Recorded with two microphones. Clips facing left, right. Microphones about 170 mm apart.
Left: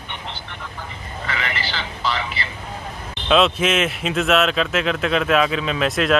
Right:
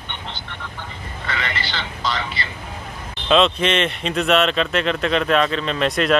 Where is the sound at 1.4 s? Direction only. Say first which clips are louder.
Even; 5° left (ahead or behind).